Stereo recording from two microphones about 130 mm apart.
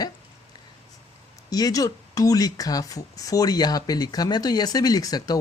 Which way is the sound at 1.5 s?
30° left (ahead or behind).